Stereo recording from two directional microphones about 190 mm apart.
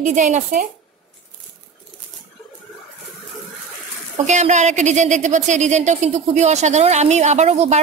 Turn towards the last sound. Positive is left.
turn(degrees=-35)  # may be behind; listen again after turning